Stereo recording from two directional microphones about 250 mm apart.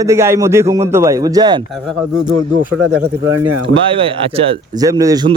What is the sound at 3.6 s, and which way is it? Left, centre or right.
Speech, right.